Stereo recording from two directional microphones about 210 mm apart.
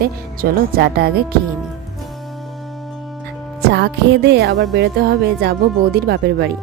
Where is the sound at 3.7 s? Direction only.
50° right (ahead or behind).